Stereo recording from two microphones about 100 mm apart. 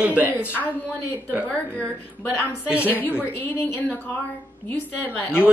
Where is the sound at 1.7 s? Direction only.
15° left (ahead or behind).